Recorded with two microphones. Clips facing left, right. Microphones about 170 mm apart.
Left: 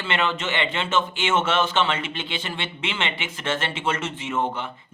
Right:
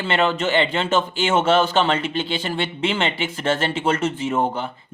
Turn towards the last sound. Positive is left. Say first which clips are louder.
# right 4 dB
turn(degrees=-35)  # may be behind; listen again after turning